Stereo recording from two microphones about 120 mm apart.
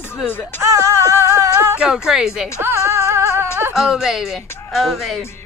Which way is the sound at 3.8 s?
5° right (ahead or behind).